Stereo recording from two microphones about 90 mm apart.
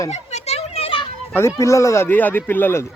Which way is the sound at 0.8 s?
75° left (ahead or behind).